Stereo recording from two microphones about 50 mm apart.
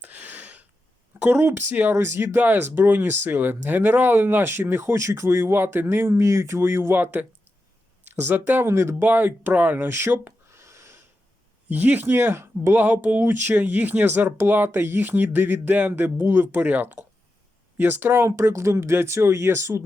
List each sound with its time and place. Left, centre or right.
0.0 s a sound: right
1.2 s speech: right
2.0 s speech: right
2.4 s speech: right
5.5 s speech: right
8.7 s speech: right
9.0 s speech: right
9.7 s speech: right
10.5 s a sound: right
11.7 s speech: right
12.5 s speech: right
18.3 s speech: right